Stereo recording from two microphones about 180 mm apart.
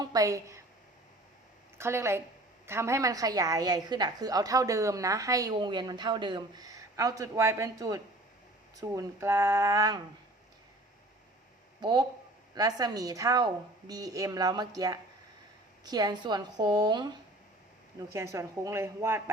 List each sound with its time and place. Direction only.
0.0 s speech: 20° right (ahead or behind)
1.8 s a woman's voice: 15° right (ahead or behind)
11.8 s a woman's voice: 25° right (ahead or behind)